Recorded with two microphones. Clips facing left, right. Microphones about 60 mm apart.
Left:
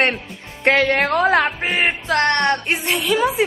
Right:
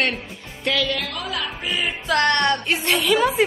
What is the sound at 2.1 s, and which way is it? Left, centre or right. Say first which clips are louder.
Speech: even; left.